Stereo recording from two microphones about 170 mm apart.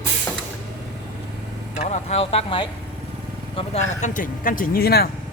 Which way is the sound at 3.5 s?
40° left (ahead or behind).